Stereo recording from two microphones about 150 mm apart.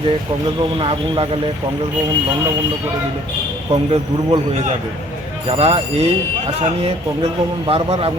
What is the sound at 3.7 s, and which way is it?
Speech, 35° right (ahead or behind).